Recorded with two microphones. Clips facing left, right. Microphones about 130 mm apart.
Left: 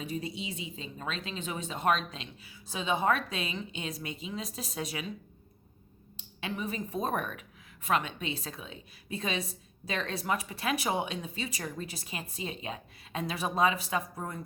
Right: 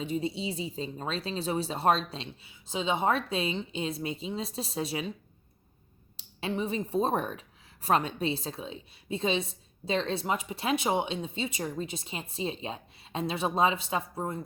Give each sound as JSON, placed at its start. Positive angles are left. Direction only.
{"t": 0.0, "sound": "speech", "side_deg": -25}
{"t": 6.1, "sound": "speech", "side_deg": -30}